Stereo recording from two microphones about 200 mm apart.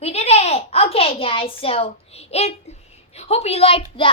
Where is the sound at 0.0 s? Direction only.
30° left (ahead or behind).